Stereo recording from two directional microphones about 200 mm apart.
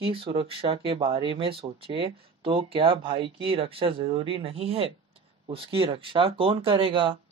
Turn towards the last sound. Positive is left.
turn(degrees=-25)  # may be behind; listen again after turning